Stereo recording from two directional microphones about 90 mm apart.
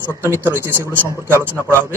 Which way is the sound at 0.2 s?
25° right (ahead or behind).